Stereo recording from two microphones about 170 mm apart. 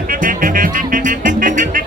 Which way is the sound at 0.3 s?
55° right (ahead or behind).